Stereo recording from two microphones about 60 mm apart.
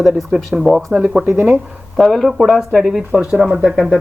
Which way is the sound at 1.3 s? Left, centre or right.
Right.